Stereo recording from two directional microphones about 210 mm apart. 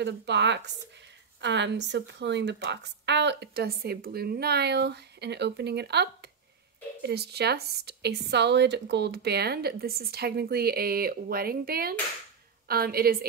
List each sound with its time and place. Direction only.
0.0 s a woman's voice: 55° right (ahead or behind)